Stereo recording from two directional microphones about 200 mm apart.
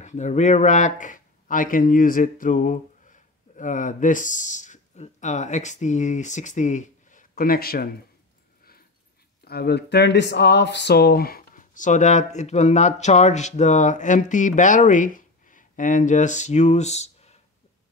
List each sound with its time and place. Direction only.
0.0 s speech: 35° left (ahead or behind)
9.4 s speech: 50° left (ahead or behind); by 17.4 s 35° left (ahead or behind)